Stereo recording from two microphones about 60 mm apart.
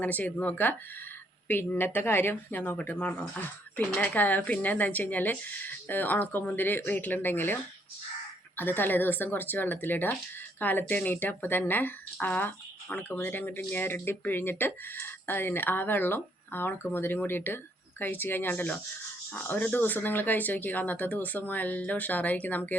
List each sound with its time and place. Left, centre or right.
0.0 s speech: left